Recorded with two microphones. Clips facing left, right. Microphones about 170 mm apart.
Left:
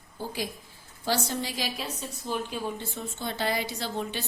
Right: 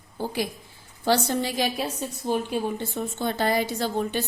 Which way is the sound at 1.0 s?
65° right (ahead or behind).